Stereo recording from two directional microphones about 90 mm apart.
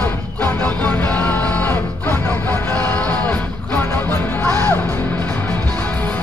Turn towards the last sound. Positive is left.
turn(degrees=20)  # may be behind; listen again after turning